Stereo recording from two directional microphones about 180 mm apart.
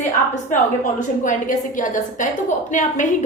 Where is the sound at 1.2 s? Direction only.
45° left (ahead or behind).